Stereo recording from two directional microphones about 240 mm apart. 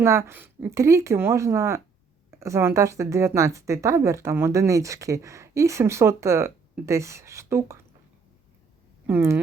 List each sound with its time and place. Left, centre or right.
0.0 s speech: centre
9.0 s speech: centre